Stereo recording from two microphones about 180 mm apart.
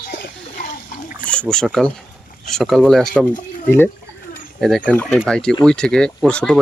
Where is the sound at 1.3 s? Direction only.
5° left (ahead or behind).